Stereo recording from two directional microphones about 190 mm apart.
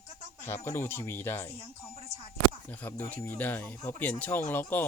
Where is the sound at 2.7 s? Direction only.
10° left (ahead or behind).